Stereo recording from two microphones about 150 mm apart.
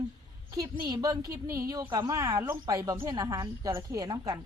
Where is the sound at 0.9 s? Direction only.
25° right (ahead or behind).